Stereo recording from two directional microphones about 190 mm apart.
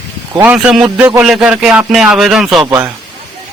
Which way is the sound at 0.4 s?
5° right (ahead or behind).